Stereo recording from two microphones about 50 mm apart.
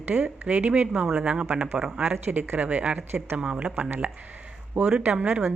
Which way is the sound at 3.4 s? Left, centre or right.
Centre.